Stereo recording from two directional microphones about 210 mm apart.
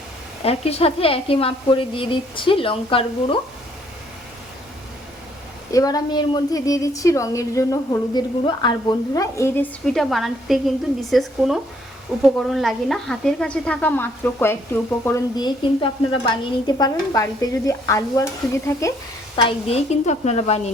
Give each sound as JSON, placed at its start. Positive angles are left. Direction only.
{"t": 0.4, "sound": "a woman's voice", "side_deg": 30}
{"t": 5.7, "sound": "speech", "side_deg": 15}
{"t": 9.8, "sound": "a woman's voice", "side_deg": 0}
{"t": 19.4, "sound": "speech", "side_deg": 25}